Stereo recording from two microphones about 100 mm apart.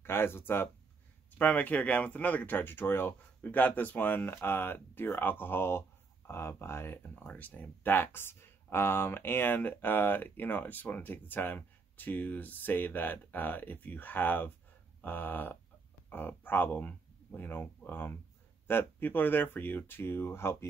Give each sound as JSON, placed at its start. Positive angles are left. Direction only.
{"t": 0.0, "sound": "speech", "side_deg": 25}
{"t": 15.0, "sound": "a sound", "side_deg": 20}
{"t": 16.1, "sound": "speech", "side_deg": 20}